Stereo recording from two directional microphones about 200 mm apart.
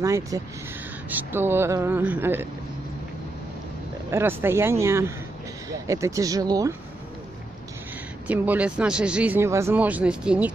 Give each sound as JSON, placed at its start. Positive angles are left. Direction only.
{"t": 0.0, "sound": "speech", "side_deg": -15}
{"t": 4.1, "sound": "speech", "side_deg": -10}
{"t": 8.3, "sound": "speech", "side_deg": -5}